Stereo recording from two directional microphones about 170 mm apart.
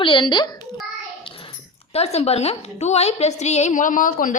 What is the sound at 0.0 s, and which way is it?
Speech, 30° left (ahead or behind).